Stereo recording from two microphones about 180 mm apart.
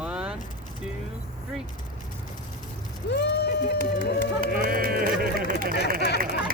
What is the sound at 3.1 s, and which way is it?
Speech, 60° left (ahead or behind).